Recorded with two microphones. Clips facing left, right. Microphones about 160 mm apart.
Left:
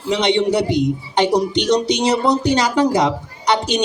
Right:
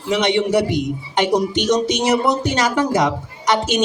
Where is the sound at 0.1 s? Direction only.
20° left (ahead or behind).